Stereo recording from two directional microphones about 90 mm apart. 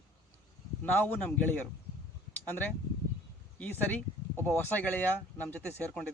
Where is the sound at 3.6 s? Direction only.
20° left (ahead or behind).